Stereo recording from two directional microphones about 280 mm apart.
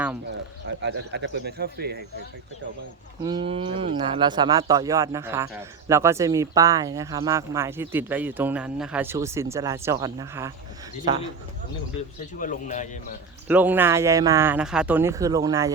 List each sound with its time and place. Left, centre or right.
0.8 s speech: right
3.2 s speech: centre
12.4 s a man's voice: left
13.5 s speech: centre